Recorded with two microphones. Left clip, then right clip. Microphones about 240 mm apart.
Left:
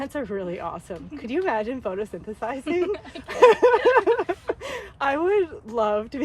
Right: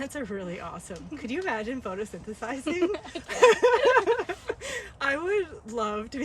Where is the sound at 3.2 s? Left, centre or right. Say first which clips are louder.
Left 4 dB; centre.